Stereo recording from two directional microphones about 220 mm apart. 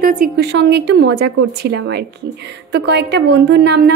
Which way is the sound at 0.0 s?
40° right (ahead or behind).